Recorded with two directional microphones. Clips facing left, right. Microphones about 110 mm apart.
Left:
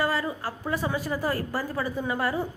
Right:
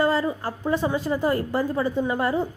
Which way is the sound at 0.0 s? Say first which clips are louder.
Right 5 dB; 25° right (ahead or behind).